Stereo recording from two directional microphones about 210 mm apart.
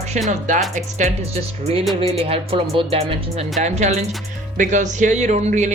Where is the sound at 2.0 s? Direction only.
25° right (ahead or behind).